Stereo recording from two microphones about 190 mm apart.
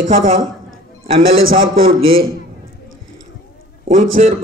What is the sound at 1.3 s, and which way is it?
Speech, 90° right.